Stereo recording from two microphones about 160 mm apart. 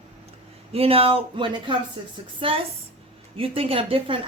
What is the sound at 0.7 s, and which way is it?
A woman's voice, 35° right (ahead or behind).